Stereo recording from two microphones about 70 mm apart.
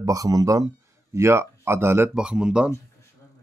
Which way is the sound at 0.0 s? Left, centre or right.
Right.